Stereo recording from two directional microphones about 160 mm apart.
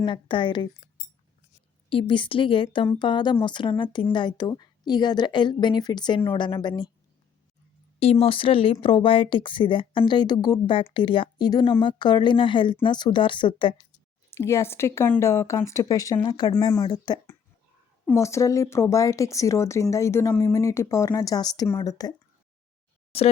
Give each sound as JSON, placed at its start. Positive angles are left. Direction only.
{"t": 0.0, "sound": "speech", "side_deg": 30}
{"t": 1.9, "sound": "speech", "side_deg": 30}
{"t": 7.9, "sound": "speech", "side_deg": 40}
{"t": 14.3, "sound": "speech", "side_deg": 15}